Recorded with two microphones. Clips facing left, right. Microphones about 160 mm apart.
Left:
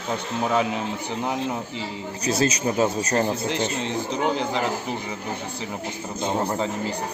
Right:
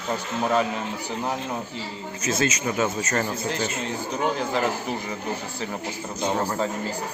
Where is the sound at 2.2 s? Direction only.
35° left (ahead or behind).